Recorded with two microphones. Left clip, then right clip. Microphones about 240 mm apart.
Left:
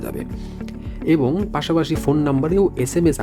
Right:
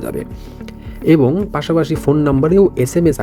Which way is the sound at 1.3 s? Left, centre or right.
Centre.